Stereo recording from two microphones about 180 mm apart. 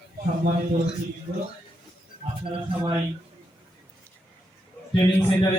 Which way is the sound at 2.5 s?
25° right (ahead or behind).